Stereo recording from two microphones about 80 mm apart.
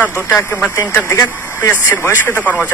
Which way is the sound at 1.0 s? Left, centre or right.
Left.